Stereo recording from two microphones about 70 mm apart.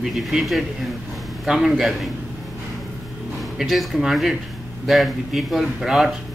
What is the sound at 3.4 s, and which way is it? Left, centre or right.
Speech, centre.